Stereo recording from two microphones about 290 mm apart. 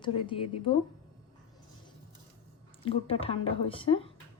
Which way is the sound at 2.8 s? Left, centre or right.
Centre.